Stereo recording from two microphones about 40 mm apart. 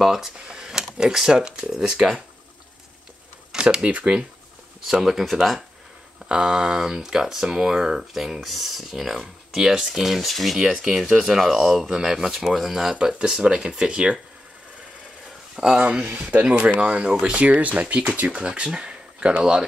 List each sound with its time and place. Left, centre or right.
0.0 s speech: centre
0.5 s cash register: centre
1.7 s speech: centre
3.5 s speech: right
5.0 s speech: centre
6.2 s speech: centre
10.6 s speech: centre
13.3 s speech: centre
15.5 s speech: centre
15.8 s speech: right